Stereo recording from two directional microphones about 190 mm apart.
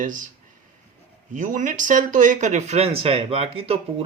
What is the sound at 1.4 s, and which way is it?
Speech, 40° right (ahead or behind).